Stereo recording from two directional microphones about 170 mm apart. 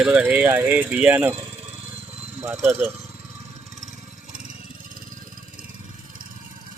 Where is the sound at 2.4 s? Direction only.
15° right (ahead or behind).